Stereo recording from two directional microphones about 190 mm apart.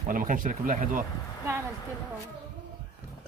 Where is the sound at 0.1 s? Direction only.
45° right (ahead or behind).